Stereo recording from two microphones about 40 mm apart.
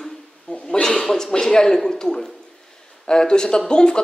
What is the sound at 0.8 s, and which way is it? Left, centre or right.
A man's voice, centre.